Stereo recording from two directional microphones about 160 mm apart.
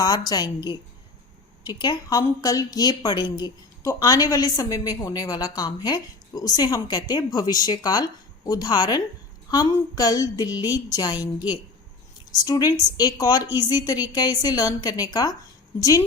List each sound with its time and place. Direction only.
0.0 s a woman's voice: 25° left (ahead or behind)